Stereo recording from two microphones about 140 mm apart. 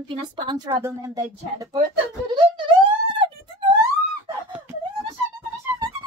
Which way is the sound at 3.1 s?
35° right (ahead or behind).